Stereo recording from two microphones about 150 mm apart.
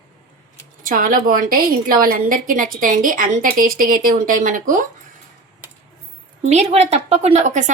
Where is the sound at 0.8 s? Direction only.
65° right (ahead or behind).